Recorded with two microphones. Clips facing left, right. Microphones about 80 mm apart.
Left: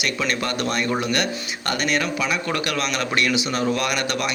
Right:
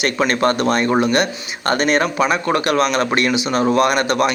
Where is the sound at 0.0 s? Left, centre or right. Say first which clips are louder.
Right 8 dB; right.